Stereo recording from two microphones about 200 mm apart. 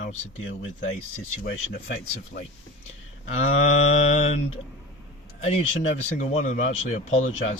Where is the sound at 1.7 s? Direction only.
55° left (ahead or behind).